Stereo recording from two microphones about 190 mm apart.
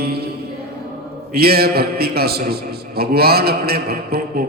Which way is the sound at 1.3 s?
55° right (ahead or behind).